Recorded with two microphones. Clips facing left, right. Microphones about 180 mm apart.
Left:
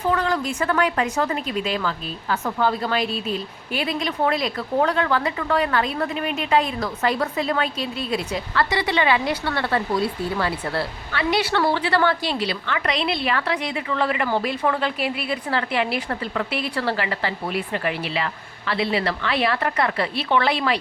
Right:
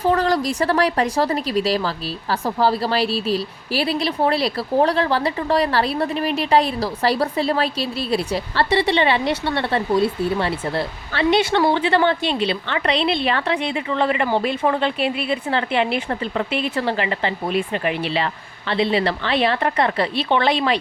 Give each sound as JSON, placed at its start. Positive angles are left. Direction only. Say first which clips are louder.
{"t": 0.1, "sound": "speech", "louder": "right 3 dB", "side_deg": -35}